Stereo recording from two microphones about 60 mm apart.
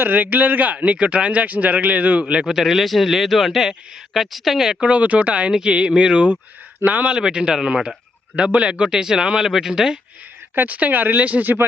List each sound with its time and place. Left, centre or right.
0.0 s speech: right; by 4.9 s centre
4.9 s speech: right
7.2 s speech: centre
10.5 s speech: right